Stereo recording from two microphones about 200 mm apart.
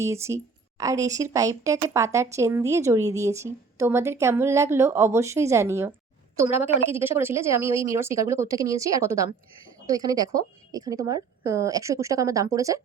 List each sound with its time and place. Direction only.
0.0 s speech: 15° right (ahead or behind)
6.9 s speech: 10° right (ahead or behind)